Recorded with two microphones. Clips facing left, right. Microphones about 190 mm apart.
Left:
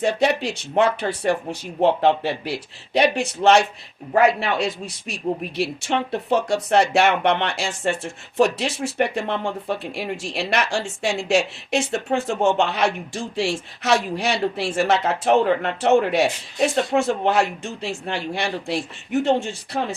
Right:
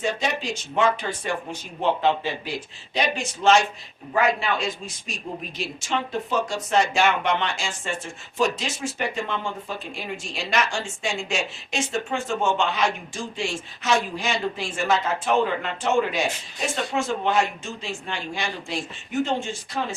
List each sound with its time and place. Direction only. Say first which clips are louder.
0.0 s a woman's voice: left 6 dB; 65° left (ahead or behind)
19.7 s speech: left 4 dB; 50° left (ahead or behind)